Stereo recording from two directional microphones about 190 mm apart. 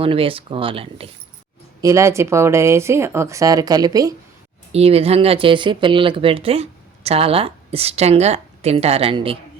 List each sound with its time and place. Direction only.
0.0 s speech: 30° right (ahead or behind)
1.8 s speech: 15° right (ahead or behind)
4.7 s speech: 30° right (ahead or behind)